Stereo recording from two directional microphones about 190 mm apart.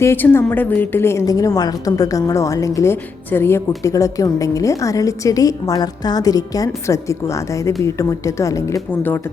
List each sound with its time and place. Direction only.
0.0 s a woman's voice: 10° left (ahead or behind)